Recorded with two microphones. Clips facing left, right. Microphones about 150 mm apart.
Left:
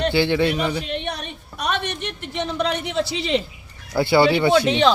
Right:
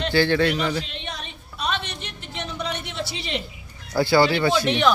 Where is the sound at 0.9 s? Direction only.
60° left (ahead or behind).